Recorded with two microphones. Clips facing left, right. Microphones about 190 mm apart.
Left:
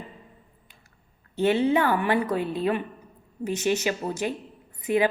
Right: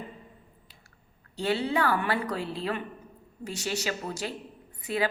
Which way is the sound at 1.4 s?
20° left (ahead or behind).